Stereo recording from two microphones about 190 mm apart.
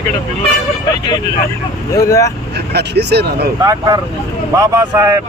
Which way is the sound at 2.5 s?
60° right (ahead or behind).